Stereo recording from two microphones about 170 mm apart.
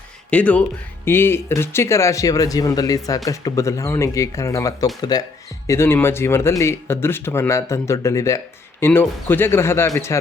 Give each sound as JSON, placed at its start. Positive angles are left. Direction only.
{"t": 0.3, "sound": "speech", "side_deg": 10}